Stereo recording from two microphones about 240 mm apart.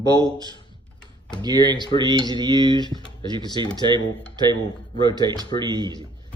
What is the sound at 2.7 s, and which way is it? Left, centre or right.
Speech, centre.